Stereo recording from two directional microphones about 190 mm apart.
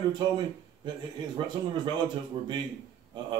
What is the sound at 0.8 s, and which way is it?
Speech, 25° right (ahead or behind).